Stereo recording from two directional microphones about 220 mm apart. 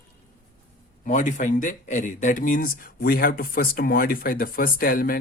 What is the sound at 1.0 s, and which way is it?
Speech, 35° left (ahead or behind).